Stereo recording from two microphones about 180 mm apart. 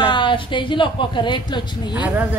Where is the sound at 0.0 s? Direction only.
25° left (ahead or behind).